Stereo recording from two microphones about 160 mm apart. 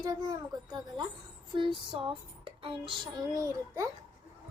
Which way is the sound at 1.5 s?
30° right (ahead or behind).